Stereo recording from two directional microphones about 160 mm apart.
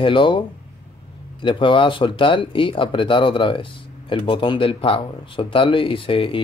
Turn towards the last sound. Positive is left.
turn(degrees=35)  # may be behind; listen again after turning